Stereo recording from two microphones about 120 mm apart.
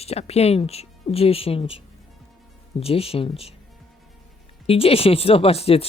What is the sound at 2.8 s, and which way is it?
Speech, 55° left (ahead or behind).